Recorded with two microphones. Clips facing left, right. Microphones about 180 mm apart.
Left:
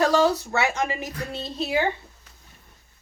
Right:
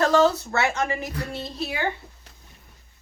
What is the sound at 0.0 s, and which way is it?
Speech, 15° left (ahead or behind).